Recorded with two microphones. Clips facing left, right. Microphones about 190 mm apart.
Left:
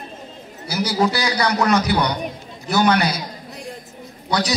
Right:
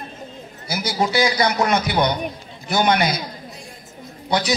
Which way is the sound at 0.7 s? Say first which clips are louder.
Left 3 dB; 40° left (ahead or behind).